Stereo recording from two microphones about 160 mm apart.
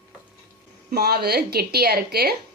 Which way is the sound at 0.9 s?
80° right.